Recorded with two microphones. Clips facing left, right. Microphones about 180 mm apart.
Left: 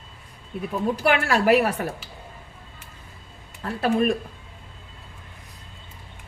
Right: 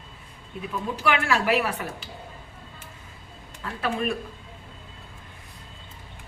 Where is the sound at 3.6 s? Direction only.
40° left (ahead or behind).